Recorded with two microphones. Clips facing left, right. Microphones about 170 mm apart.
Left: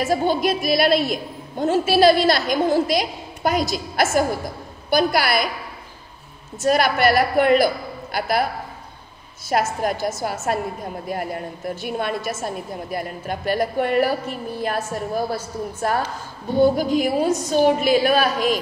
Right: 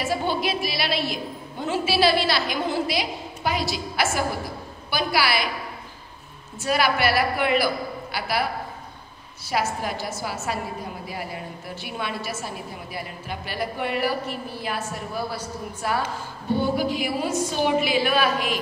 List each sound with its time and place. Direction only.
0.0 s a woman's voice: 45° left (ahead or behind)
6.6 s a woman's voice: 45° left (ahead or behind)
9.5 s a woman's voice: 45° left (ahead or behind)
16.5 s a woman's voice: 45° left (ahead or behind)